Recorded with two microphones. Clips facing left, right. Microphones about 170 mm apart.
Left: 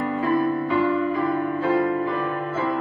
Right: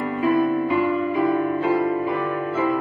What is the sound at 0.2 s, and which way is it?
Music, 15° right (ahead or behind).